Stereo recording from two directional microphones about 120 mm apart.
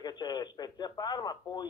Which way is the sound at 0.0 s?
35° left (ahead or behind).